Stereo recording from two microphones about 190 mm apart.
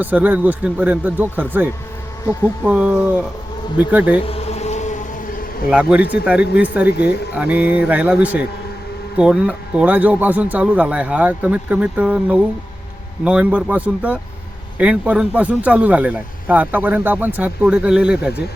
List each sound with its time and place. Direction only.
0.0 s speech: 10° right (ahead or behind)
4.3 s insect: 35° left (ahead or behind)
5.7 s speech: 5° right (ahead or behind)